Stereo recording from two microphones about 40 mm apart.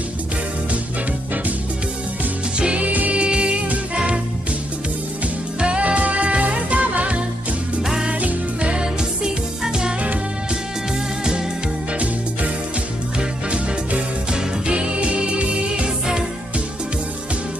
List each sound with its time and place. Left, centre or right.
2.6 s music: right
2.9 s music: right
3.2 s music: right
5.6 s music: right
7.8 s music: centre
8.1 s music: right
8.5 s music: right
13.5 s music: right